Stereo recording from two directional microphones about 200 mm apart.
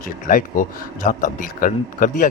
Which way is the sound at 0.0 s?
45° left (ahead or behind).